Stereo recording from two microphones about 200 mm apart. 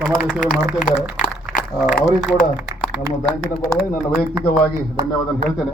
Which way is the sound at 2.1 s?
40° left (ahead or behind).